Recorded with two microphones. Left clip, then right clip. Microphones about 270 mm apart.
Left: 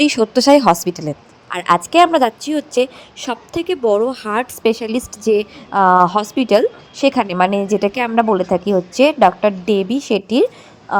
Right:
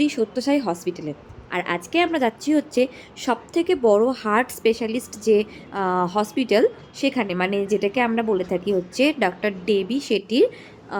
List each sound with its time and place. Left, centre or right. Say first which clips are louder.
0.0 s a woman's voice: left 9 dB; left; by 10.9 s centre